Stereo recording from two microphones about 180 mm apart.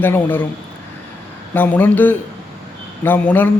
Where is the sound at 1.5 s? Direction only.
10° left (ahead or behind).